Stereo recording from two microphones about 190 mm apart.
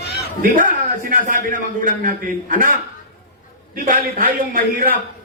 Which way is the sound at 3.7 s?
45° right (ahead or behind).